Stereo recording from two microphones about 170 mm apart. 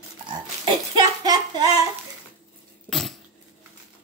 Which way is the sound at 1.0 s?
25° right (ahead or behind).